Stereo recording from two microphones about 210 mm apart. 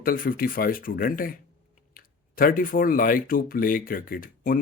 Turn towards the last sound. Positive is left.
turn(degrees=40)  # may be behind; listen again after turning